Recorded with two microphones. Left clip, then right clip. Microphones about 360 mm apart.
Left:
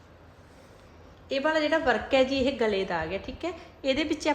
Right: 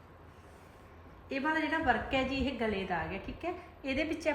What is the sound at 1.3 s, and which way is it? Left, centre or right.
A woman's voice, centre.